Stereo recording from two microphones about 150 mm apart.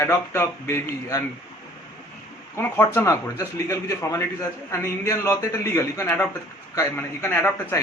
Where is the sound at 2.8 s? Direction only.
20° left (ahead or behind).